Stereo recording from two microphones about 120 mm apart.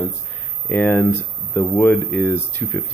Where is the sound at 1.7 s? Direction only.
Centre (ahead or behind).